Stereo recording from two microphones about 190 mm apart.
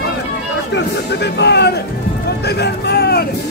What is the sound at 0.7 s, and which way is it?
Speech, 65° left (ahead or behind).